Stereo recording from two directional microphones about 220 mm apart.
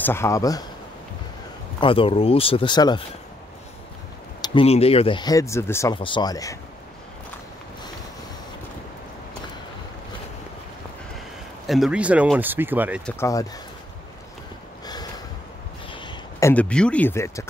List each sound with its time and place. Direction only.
0.0 s speech: 10° left (ahead or behind)
1.8 s speech: 25° left (ahead or behind)
4.4 s speech: 25° left (ahead or behind)
5.9 s speech: 20° left (ahead or behind)
11.6 s speech: centre (ahead or behind)
13.0 s speech: 10° left (ahead or behind)
15.9 s a sound: 20° left (ahead or behind)